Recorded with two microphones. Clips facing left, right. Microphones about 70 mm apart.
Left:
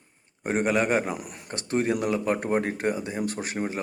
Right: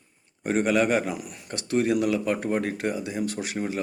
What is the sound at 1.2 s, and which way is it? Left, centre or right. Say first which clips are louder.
Speech: right 1 dB; left.